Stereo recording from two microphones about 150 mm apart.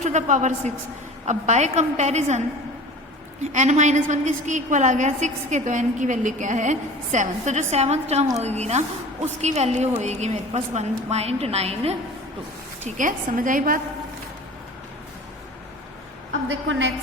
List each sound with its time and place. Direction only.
0.0 s a woman's voice: 55° right (ahead or behind)
3.5 s a woman's voice: 50° right (ahead or behind)
12.8 s a woman's voice: 60° right (ahead or behind)